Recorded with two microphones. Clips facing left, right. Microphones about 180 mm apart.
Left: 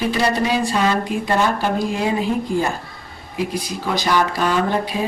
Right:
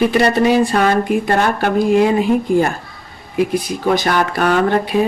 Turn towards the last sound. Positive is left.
turn(degrees=-60)  # may be behind; listen again after turning